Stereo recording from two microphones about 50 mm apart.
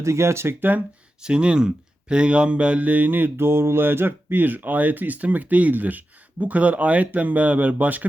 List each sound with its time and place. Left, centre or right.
0.0 s speech: right
1.2 s speech: centre